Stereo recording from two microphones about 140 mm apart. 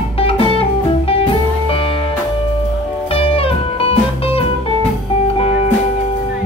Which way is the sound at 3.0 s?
45° left (ahead or behind).